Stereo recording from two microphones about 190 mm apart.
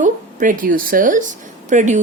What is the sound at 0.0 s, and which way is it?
A woman's voice, 45° right (ahead or behind).